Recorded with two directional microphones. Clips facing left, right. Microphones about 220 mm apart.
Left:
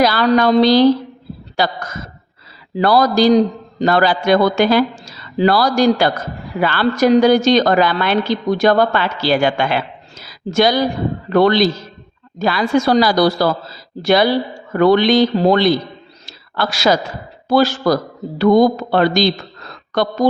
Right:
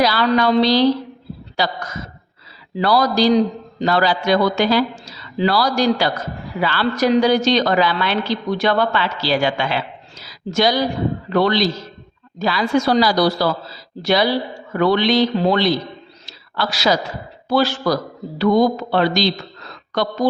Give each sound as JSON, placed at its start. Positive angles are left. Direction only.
{"t": 0.0, "sound": "a woman's voice", "side_deg": 50}
{"t": 16.2, "sound": "a sound", "side_deg": 50}
{"t": 17.5, "sound": "a woman's voice", "side_deg": 45}